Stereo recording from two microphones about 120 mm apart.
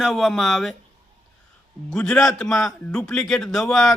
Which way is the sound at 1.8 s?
5° left (ahead or behind).